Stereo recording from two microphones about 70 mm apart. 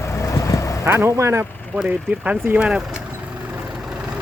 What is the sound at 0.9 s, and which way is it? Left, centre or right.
Speech, right.